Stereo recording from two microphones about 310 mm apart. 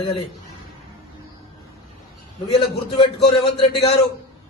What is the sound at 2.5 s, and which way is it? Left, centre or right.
Speech, centre.